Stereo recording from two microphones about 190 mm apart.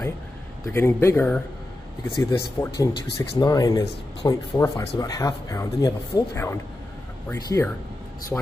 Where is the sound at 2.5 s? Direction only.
15° left (ahead or behind).